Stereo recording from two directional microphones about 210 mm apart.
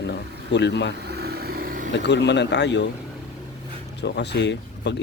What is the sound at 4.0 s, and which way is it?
Speech, 55° left (ahead or behind).